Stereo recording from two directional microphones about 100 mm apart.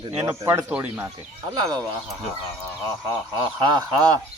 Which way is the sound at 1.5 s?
40° right (ahead or behind).